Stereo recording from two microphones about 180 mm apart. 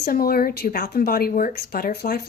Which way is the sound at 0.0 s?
55° left (ahead or behind).